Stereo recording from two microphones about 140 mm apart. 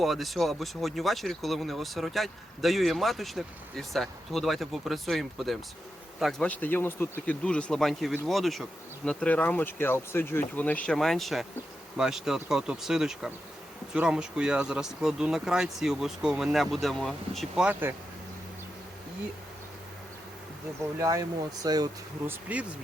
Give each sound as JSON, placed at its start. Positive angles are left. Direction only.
{"t": 0.0, "sound": "speech", "side_deg": 0}
{"t": 6.4, "sound": "speech", "side_deg": 10}
{"t": 21.0, "sound": "speech", "side_deg": -25}
{"t": 22.3, "sound": "speech", "side_deg": -10}